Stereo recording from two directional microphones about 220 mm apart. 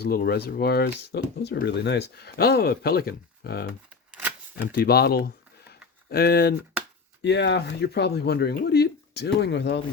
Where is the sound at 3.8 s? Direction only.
5° right (ahead or behind).